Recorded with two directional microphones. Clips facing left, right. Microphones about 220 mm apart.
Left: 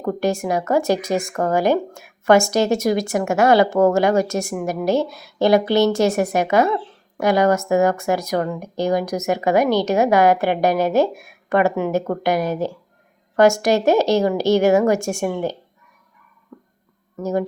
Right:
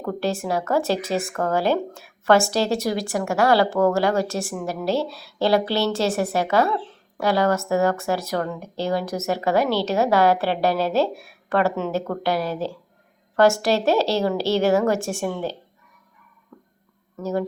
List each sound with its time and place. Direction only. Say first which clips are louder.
0.0 s speech: left 4 dB; 15° left (ahead or behind)
17.2 s speech: left 3 dB; 15° left (ahead or behind)